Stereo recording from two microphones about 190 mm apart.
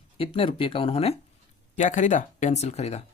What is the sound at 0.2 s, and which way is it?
Speech, 30° left (ahead or behind).